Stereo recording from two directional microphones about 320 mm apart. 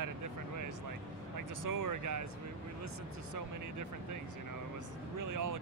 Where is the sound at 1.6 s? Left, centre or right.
Right.